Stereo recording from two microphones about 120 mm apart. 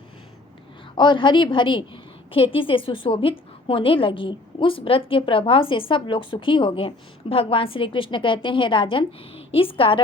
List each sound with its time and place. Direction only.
0.9 s a woman's voice: 40° left (ahead or behind)